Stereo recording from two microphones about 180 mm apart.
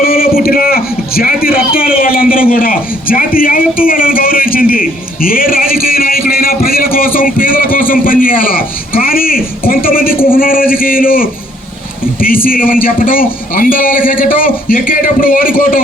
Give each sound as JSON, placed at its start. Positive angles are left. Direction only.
{"t": 0.0, "sound": "a man's voice", "side_deg": 55}
{"t": 12.5, "sound": "a man's voice", "side_deg": 50}